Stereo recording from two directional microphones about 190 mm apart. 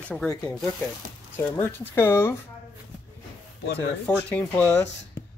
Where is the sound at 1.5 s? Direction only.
10° left (ahead or behind).